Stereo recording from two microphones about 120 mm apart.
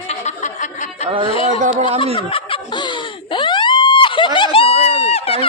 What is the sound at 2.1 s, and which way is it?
Police car, 45° left (ahead or behind).